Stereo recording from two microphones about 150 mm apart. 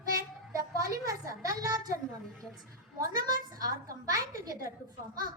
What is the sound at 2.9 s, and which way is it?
Speech, 25° right (ahead or behind).